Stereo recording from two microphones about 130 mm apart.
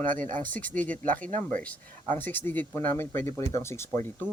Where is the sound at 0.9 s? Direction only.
90° right.